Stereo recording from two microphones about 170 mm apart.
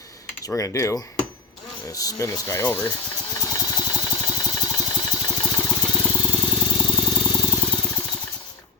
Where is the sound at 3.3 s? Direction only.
20° left (ahead or behind).